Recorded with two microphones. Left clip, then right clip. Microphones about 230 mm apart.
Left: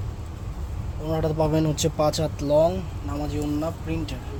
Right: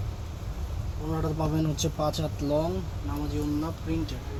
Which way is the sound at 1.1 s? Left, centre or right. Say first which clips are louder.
Left 7 dB; left.